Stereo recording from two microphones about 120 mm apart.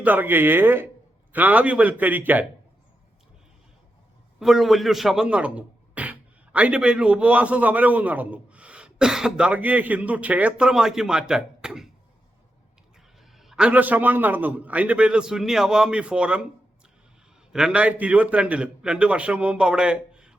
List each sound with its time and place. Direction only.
0.0 s a man's voice: 15° right (ahead or behind)
4.4 s a man's voice: 5° right (ahead or behind)
13.3 s a man's voice: centre (ahead or behind)
17.5 s a man's voice: 5° right (ahead or behind)